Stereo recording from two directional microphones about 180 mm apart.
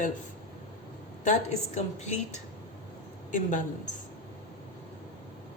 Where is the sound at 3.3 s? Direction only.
45° left (ahead or behind).